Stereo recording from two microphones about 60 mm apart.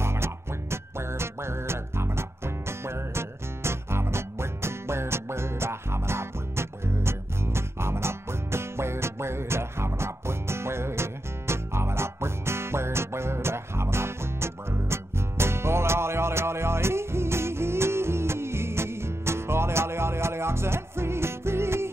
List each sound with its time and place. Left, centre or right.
0.0 s music: right